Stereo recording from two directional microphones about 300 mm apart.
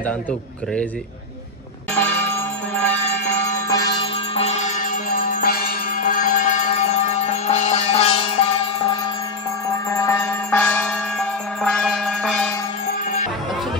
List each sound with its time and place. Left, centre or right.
2.2 s music: centre
9.8 s music: centre